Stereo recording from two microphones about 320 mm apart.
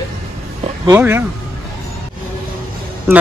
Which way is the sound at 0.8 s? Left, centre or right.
Centre.